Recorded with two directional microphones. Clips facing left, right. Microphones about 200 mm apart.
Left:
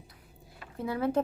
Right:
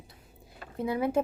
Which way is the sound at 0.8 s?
15° right (ahead or behind).